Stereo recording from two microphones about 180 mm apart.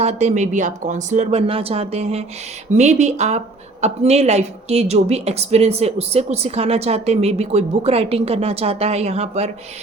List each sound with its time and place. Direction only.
0.0 s speech: 35° right (ahead or behind)